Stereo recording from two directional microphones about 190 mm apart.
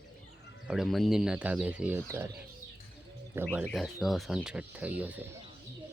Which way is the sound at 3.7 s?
Centre (ahead or behind).